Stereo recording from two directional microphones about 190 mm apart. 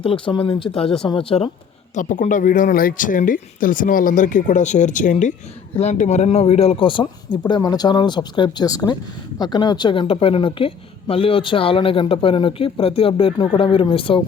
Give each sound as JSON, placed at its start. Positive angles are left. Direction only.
{"t": 0.0, "sound": "a man's voice", "side_deg": 30}
{"t": 2.0, "sound": "a man's voice", "side_deg": 45}